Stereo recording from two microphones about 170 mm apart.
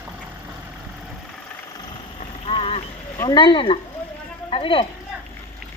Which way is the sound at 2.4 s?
35° left (ahead or behind).